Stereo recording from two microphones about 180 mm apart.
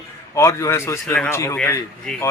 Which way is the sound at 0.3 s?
15° left (ahead or behind).